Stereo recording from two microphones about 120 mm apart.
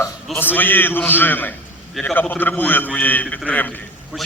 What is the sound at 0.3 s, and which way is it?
A man's voice, 15° left (ahead or behind).